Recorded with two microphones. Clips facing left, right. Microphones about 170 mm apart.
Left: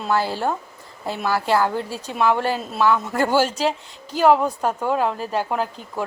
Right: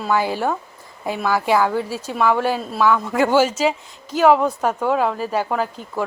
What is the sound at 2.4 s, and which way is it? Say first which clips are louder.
A woman's voice: right 2 dB; 10° right (ahead or behind).